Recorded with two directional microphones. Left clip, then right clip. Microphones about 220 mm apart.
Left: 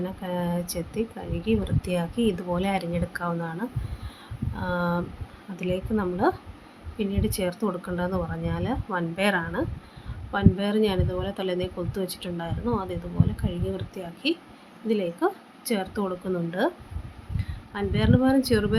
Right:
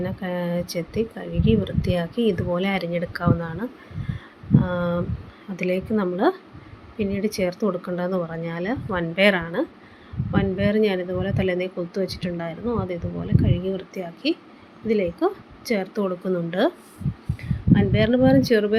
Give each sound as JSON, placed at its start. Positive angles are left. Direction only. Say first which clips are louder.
{"t": 0.0, "sound": "a woman's voice", "louder": "right 3 dB", "side_deg": -5}
{"t": 17.7, "sound": "speech", "louder": "right 4 dB", "side_deg": -5}